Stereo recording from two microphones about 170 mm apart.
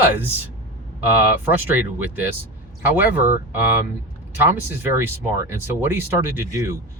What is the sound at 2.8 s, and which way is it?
Speech, 10° right (ahead or behind).